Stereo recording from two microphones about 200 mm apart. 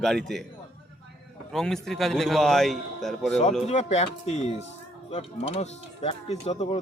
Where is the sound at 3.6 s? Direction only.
35° left (ahead or behind).